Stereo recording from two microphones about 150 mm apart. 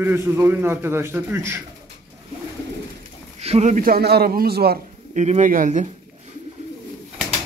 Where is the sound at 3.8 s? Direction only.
85° right.